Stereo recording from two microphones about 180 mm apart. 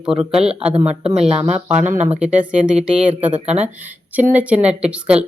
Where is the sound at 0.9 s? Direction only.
35° right (ahead or behind).